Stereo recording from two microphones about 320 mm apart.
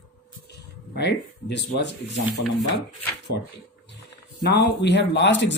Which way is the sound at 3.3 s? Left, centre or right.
Left.